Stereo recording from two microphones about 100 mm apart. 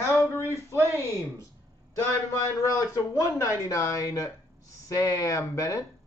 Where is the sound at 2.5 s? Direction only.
30° left (ahead or behind).